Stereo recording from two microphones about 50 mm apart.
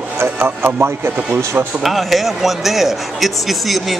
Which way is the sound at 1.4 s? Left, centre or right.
Right.